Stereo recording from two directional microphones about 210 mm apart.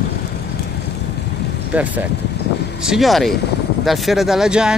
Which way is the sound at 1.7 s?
5° right (ahead or behind).